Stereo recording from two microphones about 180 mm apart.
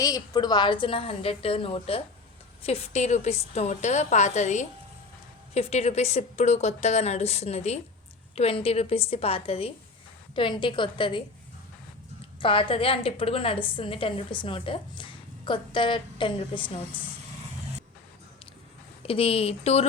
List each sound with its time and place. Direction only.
0.0 s a woman's voice: 20° left (ahead or behind)
12.4 s a woman's voice: 30° left (ahead or behind)
19.0 s a woman's voice: 30° left (ahead or behind)